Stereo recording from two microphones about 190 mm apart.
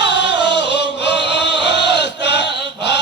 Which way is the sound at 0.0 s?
65° left (ahead or behind).